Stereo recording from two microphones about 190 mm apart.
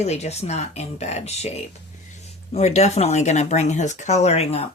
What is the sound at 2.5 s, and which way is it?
Speech, 35° left (ahead or behind).